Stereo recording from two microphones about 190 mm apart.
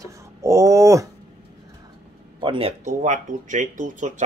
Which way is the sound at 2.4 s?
25° right (ahead or behind).